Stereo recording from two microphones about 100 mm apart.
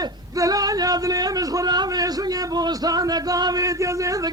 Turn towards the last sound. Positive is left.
turn(degrees=-35)  # may be behind; listen again after turning